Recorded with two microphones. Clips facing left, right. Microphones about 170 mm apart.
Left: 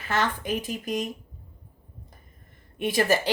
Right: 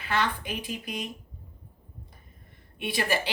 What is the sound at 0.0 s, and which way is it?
A woman's voice, 45° left (ahead or behind).